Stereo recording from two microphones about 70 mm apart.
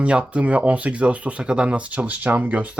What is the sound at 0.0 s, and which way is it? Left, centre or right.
Speech, centre.